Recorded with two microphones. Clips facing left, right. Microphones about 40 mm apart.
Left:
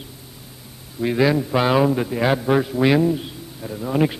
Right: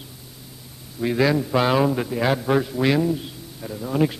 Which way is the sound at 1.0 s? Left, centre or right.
Centre.